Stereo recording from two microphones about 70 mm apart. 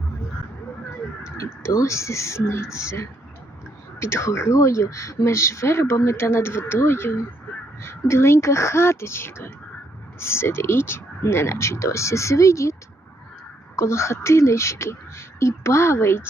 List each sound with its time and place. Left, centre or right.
1.2 s speech: left
13.7 s speech: left